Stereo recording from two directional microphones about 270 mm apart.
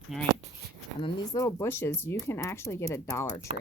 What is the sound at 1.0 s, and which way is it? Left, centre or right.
Speech, centre.